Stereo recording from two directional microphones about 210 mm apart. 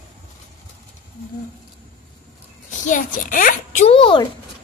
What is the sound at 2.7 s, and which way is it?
A child's voice, 40° left (ahead or behind).